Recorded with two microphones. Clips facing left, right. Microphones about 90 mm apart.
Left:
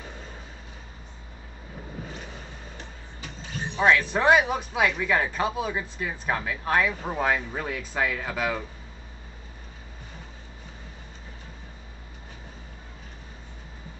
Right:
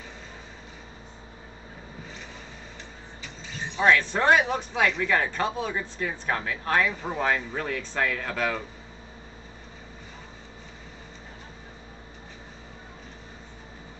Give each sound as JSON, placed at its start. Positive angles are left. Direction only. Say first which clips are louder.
{"t": 3.2, "sound": "vehicle", "louder": "left 2 dB", "side_deg": 50}
{"t": 3.8, "sound": "speech", "louder": "even", "side_deg": 5}